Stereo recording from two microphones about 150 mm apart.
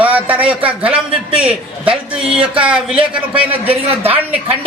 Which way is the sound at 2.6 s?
5° right (ahead or behind).